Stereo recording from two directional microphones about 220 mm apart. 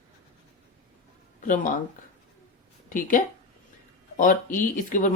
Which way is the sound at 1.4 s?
35° left (ahead or behind).